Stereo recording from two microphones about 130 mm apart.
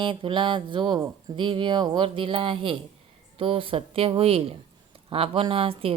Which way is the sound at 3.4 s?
45° right (ahead or behind).